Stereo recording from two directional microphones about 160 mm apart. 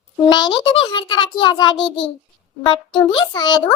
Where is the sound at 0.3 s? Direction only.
30° left (ahead or behind).